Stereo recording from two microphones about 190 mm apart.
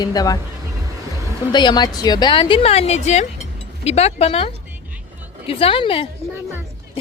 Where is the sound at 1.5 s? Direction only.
25° left (ahead or behind).